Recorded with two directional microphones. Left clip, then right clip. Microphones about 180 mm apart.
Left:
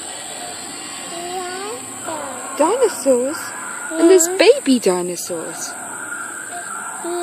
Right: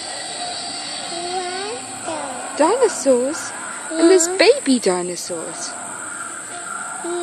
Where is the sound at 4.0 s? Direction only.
5° left (ahead or behind).